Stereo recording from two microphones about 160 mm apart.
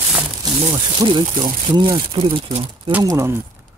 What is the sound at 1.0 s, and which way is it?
Speech, 30° right (ahead or behind).